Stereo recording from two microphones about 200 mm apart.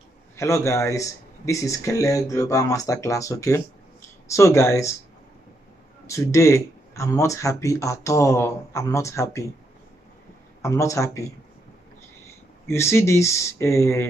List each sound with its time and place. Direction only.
0.4 s speech: 15° left (ahead or behind)
6.0 s speech: 15° left (ahead or behind)
10.6 s speech: 15° left (ahead or behind)
12.6 s speech: 15° left (ahead or behind)